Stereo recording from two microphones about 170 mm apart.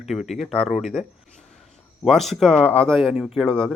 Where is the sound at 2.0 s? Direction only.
Centre (ahead or behind).